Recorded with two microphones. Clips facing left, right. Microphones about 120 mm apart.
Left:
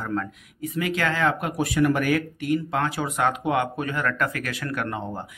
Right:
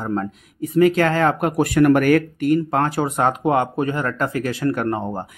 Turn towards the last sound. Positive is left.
turn(degrees=-40)  # may be behind; listen again after turning